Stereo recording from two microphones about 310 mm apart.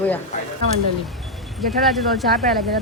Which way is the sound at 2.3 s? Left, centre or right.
Right.